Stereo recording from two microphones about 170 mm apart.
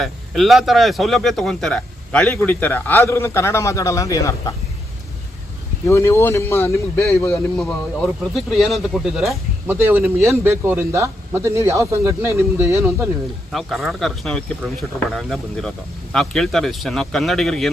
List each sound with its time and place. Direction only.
0.0 s speech: centre (ahead or behind); by 4.5 s 20° left (ahead or behind)
5.8 s speech: 15° left (ahead or behind)
7.6 s speech: centre (ahead or behind); by 13.1 s 15° right (ahead or behind)
13.5 s speech: centre (ahead or behind)